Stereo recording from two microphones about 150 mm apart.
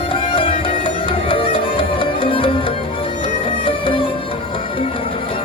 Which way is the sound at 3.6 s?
35° left (ahead or behind).